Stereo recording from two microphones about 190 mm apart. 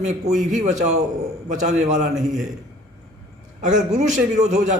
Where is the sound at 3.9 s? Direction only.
40° right (ahead or behind).